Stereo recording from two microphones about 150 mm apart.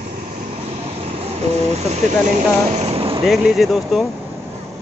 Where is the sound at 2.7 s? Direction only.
45° right (ahead or behind).